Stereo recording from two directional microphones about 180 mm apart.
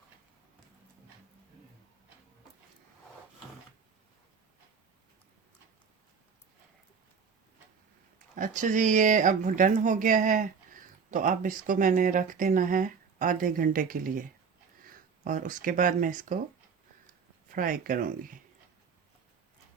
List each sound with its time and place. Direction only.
8.4 s speech: 45° right (ahead or behind)
17.5 s speech: 50° right (ahead or behind)